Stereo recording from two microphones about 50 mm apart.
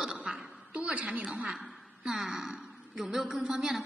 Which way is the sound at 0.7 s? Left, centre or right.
Right.